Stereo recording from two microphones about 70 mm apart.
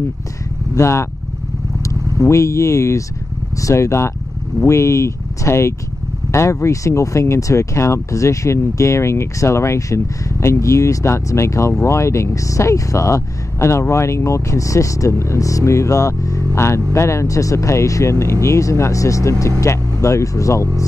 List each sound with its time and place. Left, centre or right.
0.7 s speech: left